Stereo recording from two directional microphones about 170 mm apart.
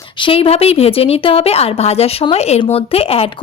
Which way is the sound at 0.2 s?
35° left (ahead or behind).